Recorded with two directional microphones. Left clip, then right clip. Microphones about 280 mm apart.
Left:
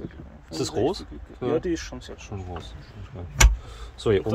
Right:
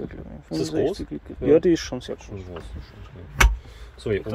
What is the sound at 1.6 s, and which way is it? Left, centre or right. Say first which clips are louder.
Speech: right 8 dB; right.